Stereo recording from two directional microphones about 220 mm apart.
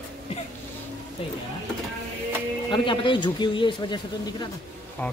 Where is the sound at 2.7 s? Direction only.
20° left (ahead or behind).